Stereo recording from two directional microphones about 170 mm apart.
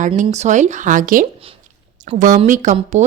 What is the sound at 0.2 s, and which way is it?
Speech, 45° right (ahead or behind).